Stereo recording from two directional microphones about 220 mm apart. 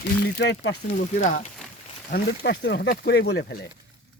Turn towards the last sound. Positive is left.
turn(degrees=50)  # may be behind; listen again after turning